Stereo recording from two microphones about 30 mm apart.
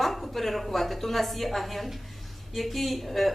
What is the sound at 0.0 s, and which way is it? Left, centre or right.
A woman's voice, centre.